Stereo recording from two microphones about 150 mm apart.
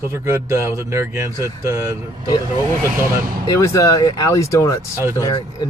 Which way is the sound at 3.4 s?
20° left (ahead or behind).